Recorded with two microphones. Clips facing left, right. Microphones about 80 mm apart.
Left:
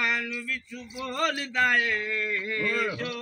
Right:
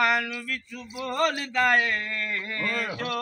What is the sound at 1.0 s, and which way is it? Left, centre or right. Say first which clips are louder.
Speech: right 3 dB; right.